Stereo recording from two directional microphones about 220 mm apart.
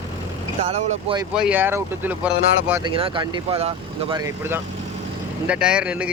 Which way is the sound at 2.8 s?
25° right (ahead or behind).